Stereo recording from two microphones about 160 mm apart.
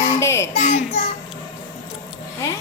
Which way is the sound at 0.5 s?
50° left (ahead or behind).